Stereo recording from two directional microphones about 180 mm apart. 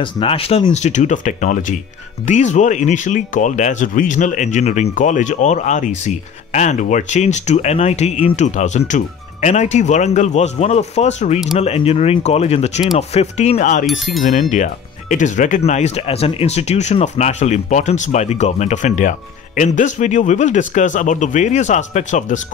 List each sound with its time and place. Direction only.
0.0 s speech: 30° left (ahead or behind)